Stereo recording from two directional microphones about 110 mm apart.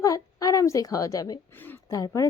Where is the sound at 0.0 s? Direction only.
30° left (ahead or behind).